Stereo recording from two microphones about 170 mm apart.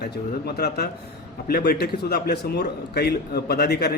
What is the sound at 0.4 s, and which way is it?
A man's voice, 70° left (ahead or behind).